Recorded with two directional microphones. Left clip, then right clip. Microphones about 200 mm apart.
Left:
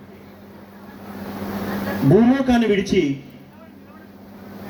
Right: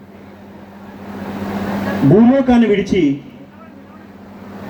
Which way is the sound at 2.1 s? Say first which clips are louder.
Right 4 dB; 35° right (ahead or behind).